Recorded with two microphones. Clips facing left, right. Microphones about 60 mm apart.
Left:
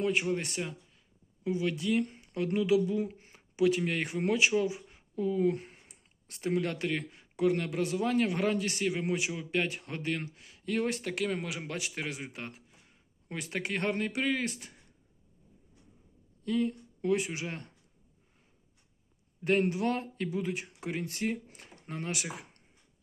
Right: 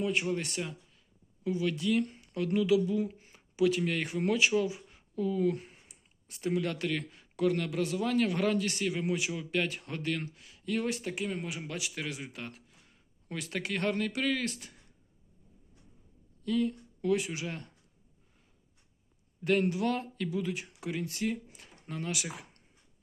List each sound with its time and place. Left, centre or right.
0.1 s speech: left
11.1 s speech: left
11.6 s speech: left
16.4 s speech: left
19.5 s speech: left